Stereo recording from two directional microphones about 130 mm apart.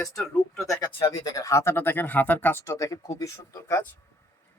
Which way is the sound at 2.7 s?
25° left (ahead or behind).